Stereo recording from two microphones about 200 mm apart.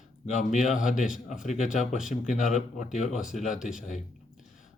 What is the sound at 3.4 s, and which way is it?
Speech, 40° left (ahead or behind).